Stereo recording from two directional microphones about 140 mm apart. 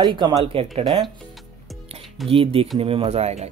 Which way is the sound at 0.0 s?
30° right (ahead or behind).